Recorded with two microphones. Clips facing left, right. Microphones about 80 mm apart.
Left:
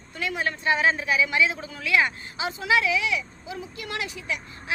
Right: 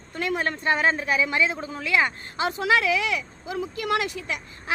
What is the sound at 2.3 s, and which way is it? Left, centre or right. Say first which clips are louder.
A woman's voice: right 2 dB; right.